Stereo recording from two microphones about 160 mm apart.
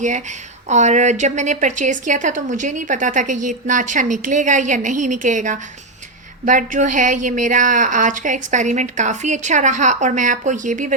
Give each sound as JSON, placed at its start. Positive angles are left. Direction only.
{"t": 0.0, "sound": "a woman's voice", "side_deg": -50}